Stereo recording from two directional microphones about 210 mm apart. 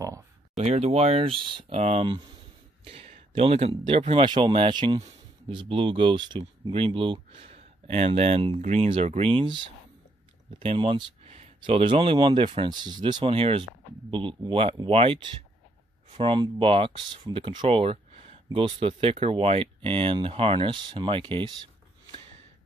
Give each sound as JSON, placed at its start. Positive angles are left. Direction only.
{"t": 0.6, "sound": "speech", "side_deg": -30}
{"t": 10.6, "sound": "speech", "side_deg": -25}